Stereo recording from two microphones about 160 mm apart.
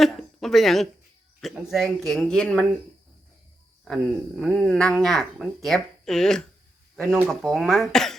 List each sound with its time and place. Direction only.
0.0 s speech: centre (ahead or behind)
3.8 s speech: centre (ahead or behind)